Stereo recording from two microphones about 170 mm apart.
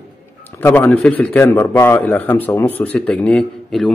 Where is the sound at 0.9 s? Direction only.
5° left (ahead or behind).